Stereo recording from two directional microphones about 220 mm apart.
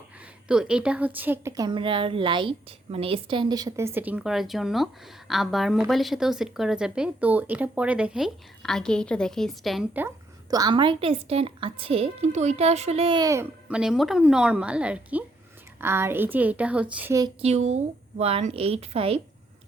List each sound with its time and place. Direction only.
0.2 s a woman's voice: 5° right (ahead or behind)
10.5 s a woman's voice: 20° right (ahead or behind)
17.4 s a woman's voice: 30° right (ahead or behind)